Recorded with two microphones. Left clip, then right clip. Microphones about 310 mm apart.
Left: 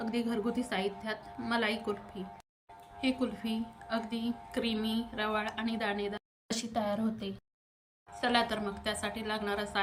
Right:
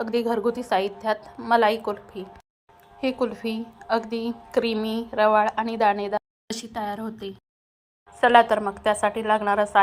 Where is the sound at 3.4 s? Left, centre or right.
Centre.